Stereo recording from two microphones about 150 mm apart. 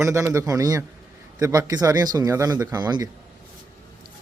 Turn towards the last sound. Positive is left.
turn(degrees=-30)  # may be behind; listen again after turning